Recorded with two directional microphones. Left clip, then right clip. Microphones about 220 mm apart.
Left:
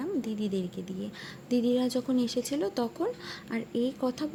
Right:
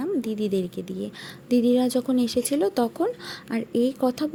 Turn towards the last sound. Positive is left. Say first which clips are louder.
# right 7 dB
turn(degrees=-20)  # may be behind; listen again after turning